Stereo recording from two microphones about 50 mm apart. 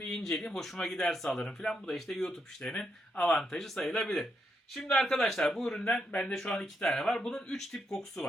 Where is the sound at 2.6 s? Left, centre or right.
Left.